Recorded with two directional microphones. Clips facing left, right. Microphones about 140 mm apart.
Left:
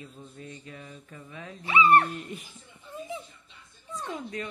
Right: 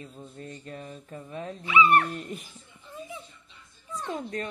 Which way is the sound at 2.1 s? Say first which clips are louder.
Right 2 dB; 45° right (ahead or behind).